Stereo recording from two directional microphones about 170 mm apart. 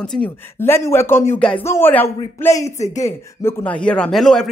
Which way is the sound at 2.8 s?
45° left (ahead or behind).